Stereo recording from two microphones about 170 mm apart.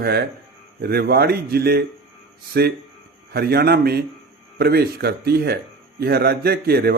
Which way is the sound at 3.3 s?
65° right (ahead or behind).